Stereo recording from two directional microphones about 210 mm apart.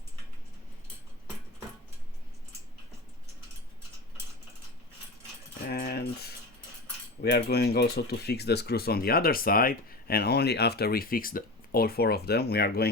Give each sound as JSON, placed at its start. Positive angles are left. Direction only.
{"t": 5.6, "sound": "cutlery", "side_deg": 50}
{"t": 7.2, "sound": "speech", "side_deg": 50}